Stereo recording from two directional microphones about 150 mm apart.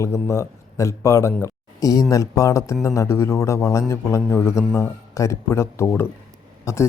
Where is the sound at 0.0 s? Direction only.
20° left (ahead or behind).